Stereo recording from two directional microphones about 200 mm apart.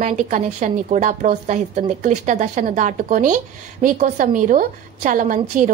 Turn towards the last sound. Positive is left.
turn(degrees=-40)  # may be behind; listen again after turning